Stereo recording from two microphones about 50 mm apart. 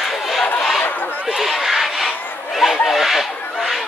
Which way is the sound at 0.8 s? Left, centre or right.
Left.